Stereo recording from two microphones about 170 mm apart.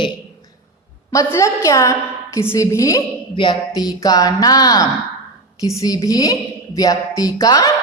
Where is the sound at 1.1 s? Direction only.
15° left (ahead or behind).